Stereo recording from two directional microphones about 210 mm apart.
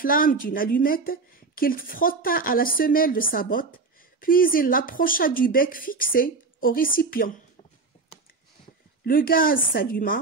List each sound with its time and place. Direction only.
0.0 s a woman's voice: 40° left (ahead or behind)
9.0 s a woman's voice: 45° left (ahead or behind)